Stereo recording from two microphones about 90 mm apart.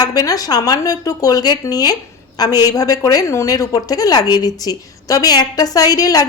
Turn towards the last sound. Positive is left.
turn(degrees=45)  # may be behind; listen again after turning